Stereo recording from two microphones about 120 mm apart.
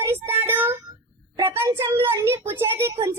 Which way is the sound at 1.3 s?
25° right (ahead or behind).